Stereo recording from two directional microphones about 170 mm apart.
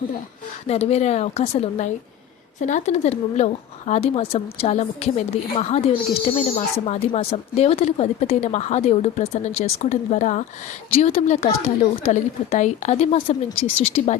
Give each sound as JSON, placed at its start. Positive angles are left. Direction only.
{"t": 0.7, "sound": "speech", "side_deg": 40}